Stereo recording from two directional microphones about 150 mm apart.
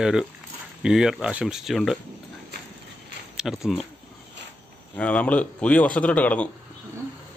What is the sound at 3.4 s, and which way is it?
Speech, centre (ahead or behind).